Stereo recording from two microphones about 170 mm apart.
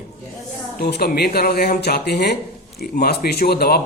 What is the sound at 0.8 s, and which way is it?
Speech, 70° left (ahead or behind).